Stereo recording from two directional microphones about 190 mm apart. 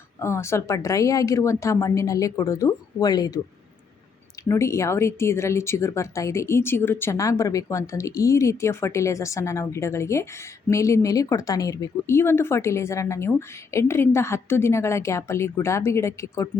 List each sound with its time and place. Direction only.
0.2 s speech: 15° left (ahead or behind)
4.4 s speech: 15° left (ahead or behind)